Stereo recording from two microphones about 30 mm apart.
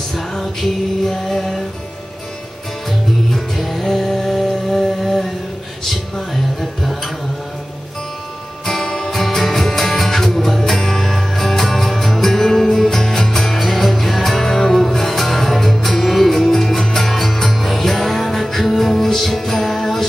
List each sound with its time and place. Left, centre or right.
0.3 s music: centre
3.3 s music: centre
8.6 s music: centre
9.1 s music: centre